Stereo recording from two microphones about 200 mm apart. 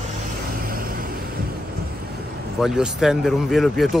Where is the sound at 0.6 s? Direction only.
45° right (ahead or behind).